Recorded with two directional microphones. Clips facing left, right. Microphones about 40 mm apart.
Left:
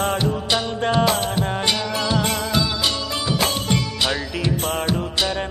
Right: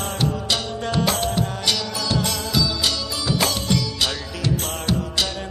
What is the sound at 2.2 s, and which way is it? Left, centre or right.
Music, left.